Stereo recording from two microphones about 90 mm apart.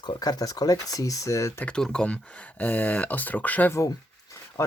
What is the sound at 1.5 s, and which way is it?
Speech, 10° left (ahead or behind).